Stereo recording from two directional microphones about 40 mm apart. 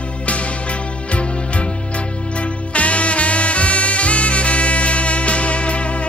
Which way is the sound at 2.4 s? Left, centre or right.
Left.